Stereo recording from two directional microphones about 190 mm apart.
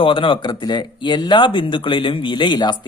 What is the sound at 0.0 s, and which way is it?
Speech, 25° left (ahead or behind).